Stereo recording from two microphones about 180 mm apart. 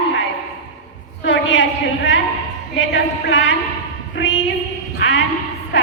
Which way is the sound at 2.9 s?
80° left.